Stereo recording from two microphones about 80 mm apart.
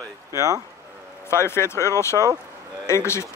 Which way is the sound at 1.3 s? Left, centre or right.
Left.